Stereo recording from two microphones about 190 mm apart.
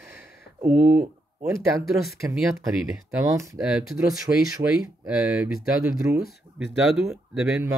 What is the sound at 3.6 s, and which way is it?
Speech, 5° right (ahead or behind).